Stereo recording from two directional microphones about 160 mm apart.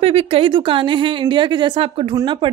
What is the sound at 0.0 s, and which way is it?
A woman's voice, 35° right (ahead or behind).